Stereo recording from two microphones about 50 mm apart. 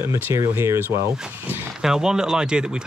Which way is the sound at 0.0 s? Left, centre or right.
Right.